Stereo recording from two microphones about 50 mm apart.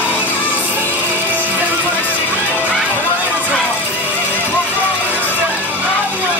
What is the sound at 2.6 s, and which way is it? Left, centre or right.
Music, right.